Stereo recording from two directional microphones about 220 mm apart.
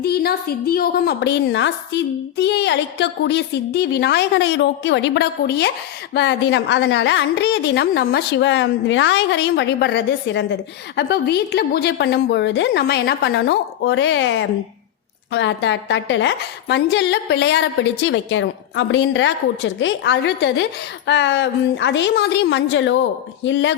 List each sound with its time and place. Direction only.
0.0 s a woman's voice: 45° left (ahead or behind)